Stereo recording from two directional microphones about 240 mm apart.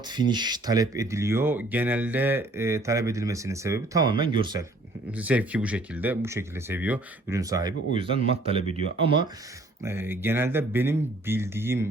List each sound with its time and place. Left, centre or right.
0.1 s speech: centre
5.1 s speech: centre
9.8 s speech: centre